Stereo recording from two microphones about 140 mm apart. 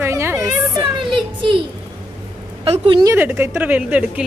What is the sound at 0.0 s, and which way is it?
Music, 20° right (ahead or behind).